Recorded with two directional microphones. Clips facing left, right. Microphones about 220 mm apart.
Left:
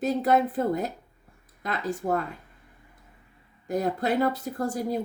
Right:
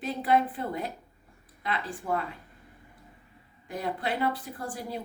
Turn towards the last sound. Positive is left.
turn(degrees=40)  # may be behind; listen again after turning